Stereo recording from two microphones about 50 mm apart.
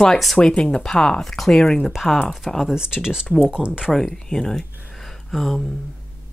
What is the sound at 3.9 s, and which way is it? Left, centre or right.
Speech, centre.